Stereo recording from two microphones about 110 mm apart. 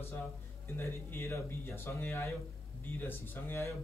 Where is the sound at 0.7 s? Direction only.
25° left (ahead or behind).